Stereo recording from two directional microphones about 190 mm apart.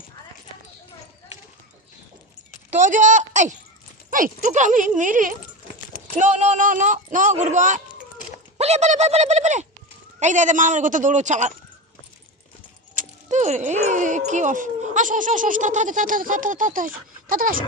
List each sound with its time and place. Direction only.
2.6 s speech: 40° right (ahead or behind)
13.0 s speech: 40° right (ahead or behind)